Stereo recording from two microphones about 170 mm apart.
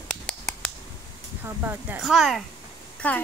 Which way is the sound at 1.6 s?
10° right (ahead or behind).